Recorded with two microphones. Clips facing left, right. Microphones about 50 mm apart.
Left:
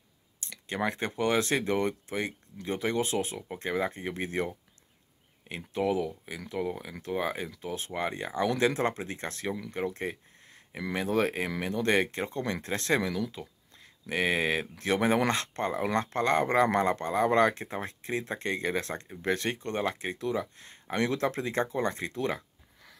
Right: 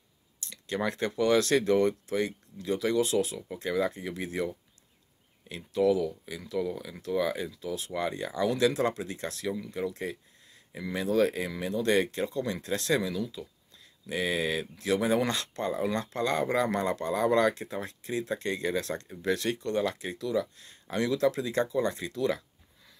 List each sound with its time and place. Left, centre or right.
0.4 s speech: left